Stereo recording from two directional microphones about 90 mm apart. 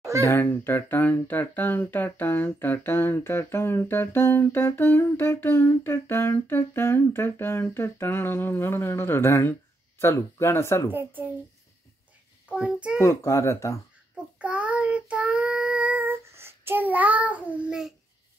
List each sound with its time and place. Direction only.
0.2 s speech: 25° left (ahead or behind)
10.9 s a woman's voice: 20° right (ahead or behind)
12.4 s a child's voice: 15° right (ahead or behind)
13.0 s a child's voice: 35° left (ahead or behind)
14.1 s child singing: 15° right (ahead or behind)